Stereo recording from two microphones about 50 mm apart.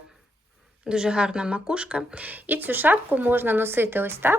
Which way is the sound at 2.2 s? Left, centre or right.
Right.